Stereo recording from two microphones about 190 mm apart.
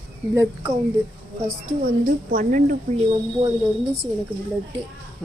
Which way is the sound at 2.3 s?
45° right (ahead or behind).